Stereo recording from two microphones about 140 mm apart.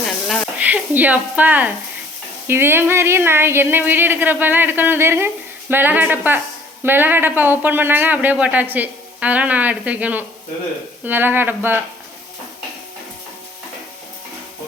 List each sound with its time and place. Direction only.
0.6 s speech: 10° right (ahead or behind)